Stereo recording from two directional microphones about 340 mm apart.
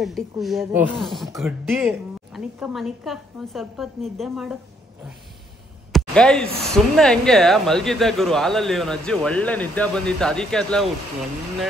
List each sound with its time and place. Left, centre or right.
0.0 s speech: centre
5.9 s a sound: centre
6.6 s speech: centre